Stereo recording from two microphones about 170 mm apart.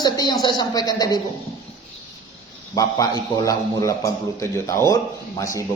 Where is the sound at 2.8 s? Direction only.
20° left (ahead or behind).